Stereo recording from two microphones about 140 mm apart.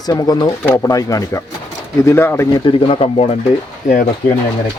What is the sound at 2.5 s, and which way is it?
Speech, 35° left (ahead or behind).